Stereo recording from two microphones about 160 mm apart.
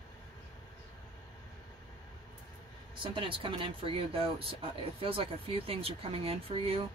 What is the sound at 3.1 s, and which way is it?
Speech, 30° right (ahead or behind).